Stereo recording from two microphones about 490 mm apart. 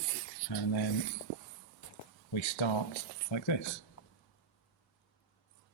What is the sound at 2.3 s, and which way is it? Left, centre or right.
Speech, left.